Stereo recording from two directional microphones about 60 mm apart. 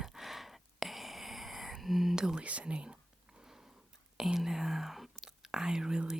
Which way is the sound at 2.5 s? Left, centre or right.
Centre.